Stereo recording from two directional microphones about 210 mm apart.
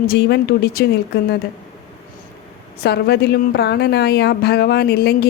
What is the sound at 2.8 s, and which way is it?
Speech, 50° left (ahead or behind).